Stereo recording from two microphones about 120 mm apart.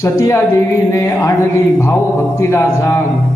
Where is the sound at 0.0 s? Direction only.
25° left (ahead or behind).